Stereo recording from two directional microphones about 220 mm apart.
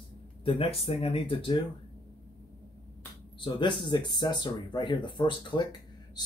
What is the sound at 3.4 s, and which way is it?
Speech, 20° left (ahead or behind).